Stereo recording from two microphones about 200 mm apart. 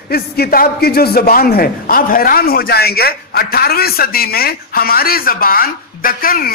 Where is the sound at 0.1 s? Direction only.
50° left (ahead or behind).